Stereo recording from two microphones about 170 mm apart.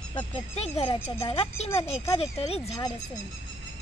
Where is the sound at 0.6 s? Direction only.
35° left (ahead or behind).